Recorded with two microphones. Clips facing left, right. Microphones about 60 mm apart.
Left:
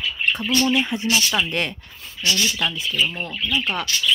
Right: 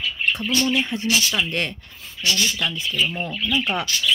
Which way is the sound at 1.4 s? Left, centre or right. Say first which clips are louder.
Left 1 dB; centre.